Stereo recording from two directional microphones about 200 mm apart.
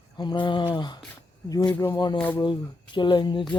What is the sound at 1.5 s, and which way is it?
Speech, 20° left (ahead or behind).